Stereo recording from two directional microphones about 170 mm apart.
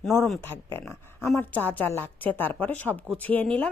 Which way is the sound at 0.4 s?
15° left (ahead or behind).